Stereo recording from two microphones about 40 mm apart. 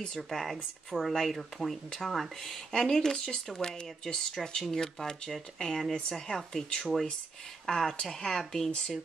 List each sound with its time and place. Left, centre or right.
0.0 s speech: centre
5.9 s speech: centre